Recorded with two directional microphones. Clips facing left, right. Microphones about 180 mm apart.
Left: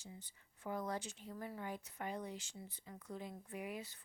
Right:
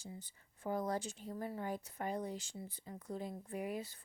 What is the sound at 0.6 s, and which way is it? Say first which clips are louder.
Speech: right 4 dB; 35° right (ahead or behind).